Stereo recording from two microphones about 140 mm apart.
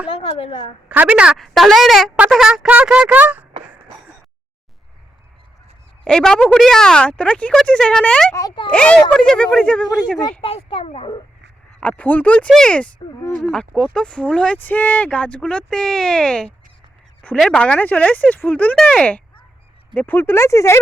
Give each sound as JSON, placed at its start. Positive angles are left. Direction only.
{"t": 0.1, "sound": "a woman's voice", "side_deg": 40}
{"t": 0.9, "sound": "a woman's voice", "side_deg": -10}
{"t": 6.1, "sound": "a woman's voice", "side_deg": 5}
{"t": 8.3, "sound": "speech", "side_deg": 25}
{"t": 8.7, "sound": "speech", "side_deg": 10}
{"t": 10.4, "sound": "speech", "side_deg": 40}
{"t": 11.8, "sound": "speech", "side_deg": 10}